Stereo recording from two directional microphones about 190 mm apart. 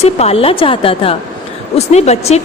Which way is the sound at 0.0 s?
35° left (ahead or behind).